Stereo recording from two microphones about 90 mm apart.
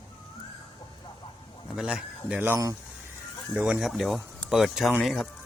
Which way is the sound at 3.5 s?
15° right (ahead or behind).